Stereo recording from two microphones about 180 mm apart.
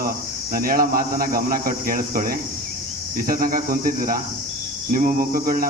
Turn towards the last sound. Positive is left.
turn(degrees=-50)  # may be behind; listen again after turning